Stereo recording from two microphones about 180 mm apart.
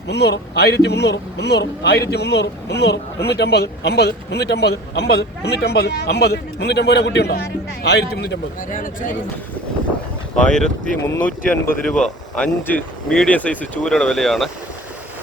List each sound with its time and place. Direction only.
0.1 s speech: 65° left (ahead or behind)
8.7 s speech: 45° left (ahead or behind)
10.3 s speech: 5° left (ahead or behind)
11.0 s speech: 15° left (ahead or behind)